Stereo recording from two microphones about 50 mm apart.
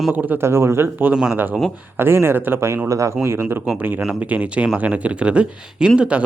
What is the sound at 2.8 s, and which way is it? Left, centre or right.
Speech, right.